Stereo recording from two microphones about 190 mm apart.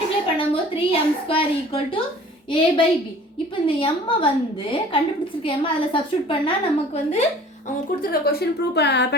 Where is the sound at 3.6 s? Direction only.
30° left (ahead or behind).